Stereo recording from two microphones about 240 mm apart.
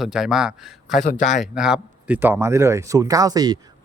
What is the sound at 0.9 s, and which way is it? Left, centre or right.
Speech, left.